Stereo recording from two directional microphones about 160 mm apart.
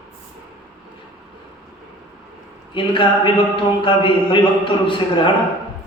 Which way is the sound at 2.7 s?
30° left (ahead or behind).